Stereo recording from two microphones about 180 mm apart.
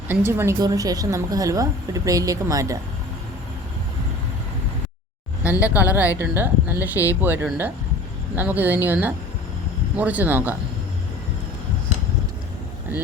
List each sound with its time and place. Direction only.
0.3 s speech: 15° right (ahead or behind)
5.4 s speech: 10° right (ahead or behind)